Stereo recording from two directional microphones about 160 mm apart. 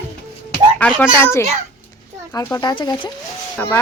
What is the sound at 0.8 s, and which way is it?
Speech, 10° left (ahead or behind).